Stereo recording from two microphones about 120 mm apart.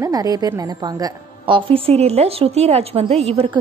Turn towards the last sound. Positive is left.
turn(degrees=-60)  # may be behind; listen again after turning